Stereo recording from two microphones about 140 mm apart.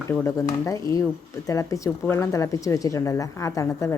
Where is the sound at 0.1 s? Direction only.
20° left (ahead or behind).